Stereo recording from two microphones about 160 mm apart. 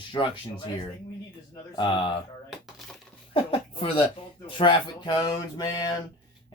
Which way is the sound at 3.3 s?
35° left (ahead or behind).